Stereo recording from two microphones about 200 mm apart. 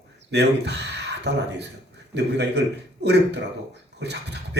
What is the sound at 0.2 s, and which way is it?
Speech, 60° right (ahead or behind).